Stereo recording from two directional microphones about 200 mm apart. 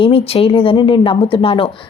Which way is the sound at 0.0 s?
30° left (ahead or behind).